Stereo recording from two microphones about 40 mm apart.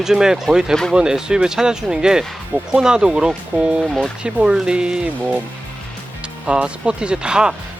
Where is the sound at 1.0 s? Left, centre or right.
Centre.